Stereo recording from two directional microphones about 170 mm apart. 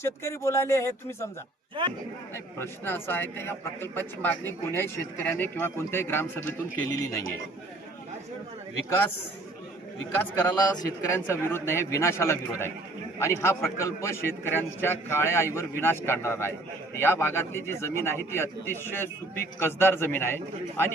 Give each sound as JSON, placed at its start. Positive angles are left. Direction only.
{"t": 0.0, "sound": "a man's voice", "side_deg": 15}
{"t": 2.3, "sound": "a man's voice", "side_deg": 15}
{"t": 10.4, "sound": "a man's voice", "side_deg": 20}